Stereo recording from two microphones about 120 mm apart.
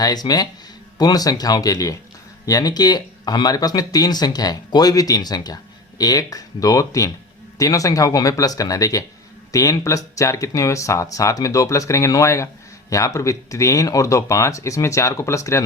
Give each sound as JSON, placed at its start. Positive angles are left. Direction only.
{"t": 0.0, "sound": "speech", "side_deg": 35}